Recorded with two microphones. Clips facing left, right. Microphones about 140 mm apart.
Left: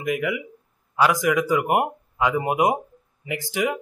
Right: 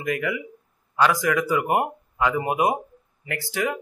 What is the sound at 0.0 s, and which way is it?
A man's voice, 15° left (ahead or behind).